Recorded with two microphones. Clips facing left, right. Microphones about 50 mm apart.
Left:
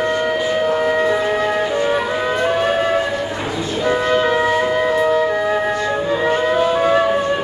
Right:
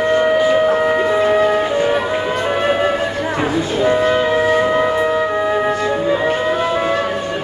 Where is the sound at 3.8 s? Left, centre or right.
Centre.